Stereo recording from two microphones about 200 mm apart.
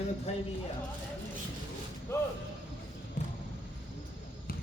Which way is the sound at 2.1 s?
15° left (ahead or behind).